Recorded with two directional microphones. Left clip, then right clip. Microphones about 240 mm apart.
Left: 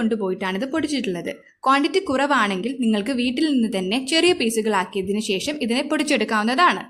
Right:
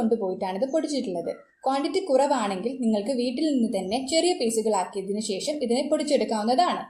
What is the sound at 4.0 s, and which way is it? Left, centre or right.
Speech, left.